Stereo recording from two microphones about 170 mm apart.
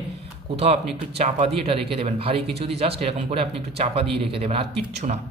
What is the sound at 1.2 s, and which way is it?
Speech, 35° right (ahead or behind).